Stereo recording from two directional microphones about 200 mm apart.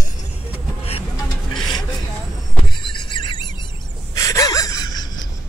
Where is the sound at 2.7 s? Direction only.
25° left (ahead or behind).